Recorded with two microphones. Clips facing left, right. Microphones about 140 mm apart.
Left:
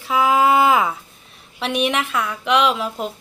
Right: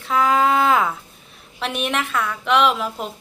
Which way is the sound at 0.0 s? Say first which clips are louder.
Left 1 dB; 5° left (ahead or behind).